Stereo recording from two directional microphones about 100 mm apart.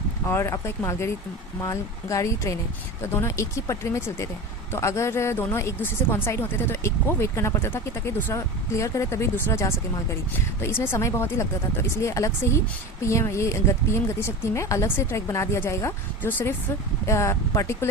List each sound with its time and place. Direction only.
0.3 s speech: 25° left (ahead or behind)